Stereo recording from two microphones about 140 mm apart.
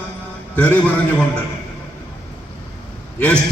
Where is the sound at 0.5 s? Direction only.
10° left (ahead or behind).